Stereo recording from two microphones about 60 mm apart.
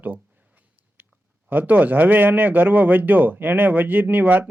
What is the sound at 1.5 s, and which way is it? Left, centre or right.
Speech, right.